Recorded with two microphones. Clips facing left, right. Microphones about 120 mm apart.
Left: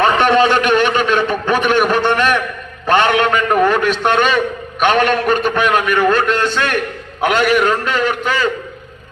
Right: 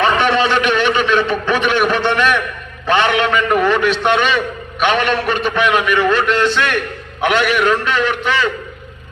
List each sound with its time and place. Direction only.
0.0 s a man's voice: 45° left (ahead or behind)